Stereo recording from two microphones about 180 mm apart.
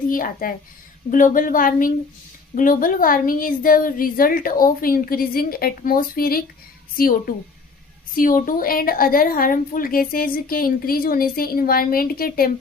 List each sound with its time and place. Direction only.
0.1 s a woman's voice: 50° left (ahead or behind)